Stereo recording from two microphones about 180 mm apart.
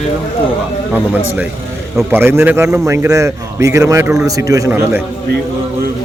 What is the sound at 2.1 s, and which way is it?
A man's voice, 15° right (ahead or behind).